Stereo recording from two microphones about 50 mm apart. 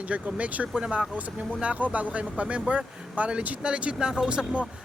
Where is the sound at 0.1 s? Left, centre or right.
Right.